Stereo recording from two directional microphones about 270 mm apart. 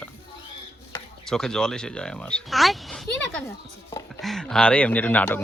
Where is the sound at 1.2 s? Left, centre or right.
Centre.